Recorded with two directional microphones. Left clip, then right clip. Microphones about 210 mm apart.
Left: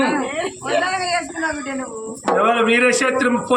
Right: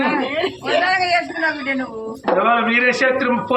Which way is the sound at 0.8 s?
25° right (ahead or behind).